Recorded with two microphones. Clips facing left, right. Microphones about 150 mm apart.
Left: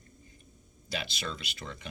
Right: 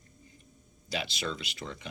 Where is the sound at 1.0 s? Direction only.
50° left (ahead or behind).